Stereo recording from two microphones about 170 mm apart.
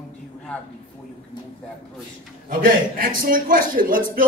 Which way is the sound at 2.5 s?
55° right (ahead or behind).